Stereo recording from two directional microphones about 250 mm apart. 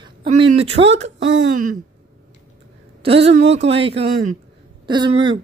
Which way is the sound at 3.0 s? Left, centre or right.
Right.